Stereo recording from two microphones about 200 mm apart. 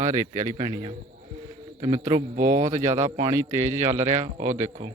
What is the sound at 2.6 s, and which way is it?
A man's voice, 15° right (ahead or behind).